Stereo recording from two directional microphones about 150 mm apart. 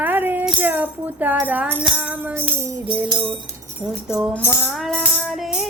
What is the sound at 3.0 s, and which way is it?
Music, 30° right (ahead or behind).